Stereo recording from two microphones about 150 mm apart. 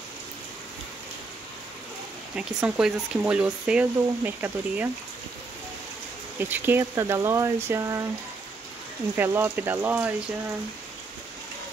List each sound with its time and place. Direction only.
2.3 s speech: 5° right (ahead or behind)
6.3 s speech: 15° right (ahead or behind)
9.1 s speech: 15° right (ahead or behind)